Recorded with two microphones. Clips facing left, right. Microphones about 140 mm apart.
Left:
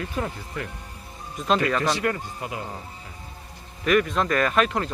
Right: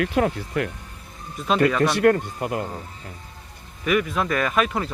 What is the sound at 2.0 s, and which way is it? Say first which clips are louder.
Speech: right 9 dB; 55° right (ahead or behind).